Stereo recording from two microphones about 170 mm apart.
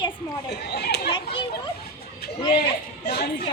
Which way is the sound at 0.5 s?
75° left (ahead or behind).